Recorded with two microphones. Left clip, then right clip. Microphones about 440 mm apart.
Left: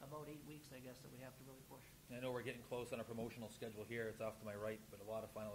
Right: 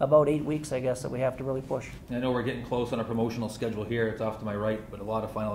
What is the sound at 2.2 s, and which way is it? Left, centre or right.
Speech, left.